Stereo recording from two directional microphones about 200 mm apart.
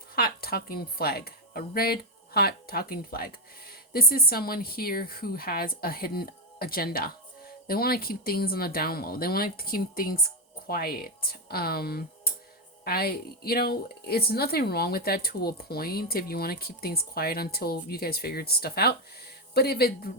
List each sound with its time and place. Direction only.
0.2 s speech: 50° left (ahead or behind)